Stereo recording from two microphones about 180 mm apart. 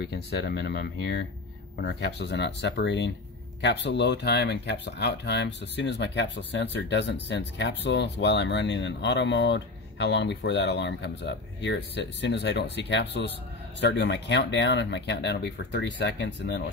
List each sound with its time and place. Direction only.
0.0 s speech: 65° left (ahead or behind); by 16.7 s 85° left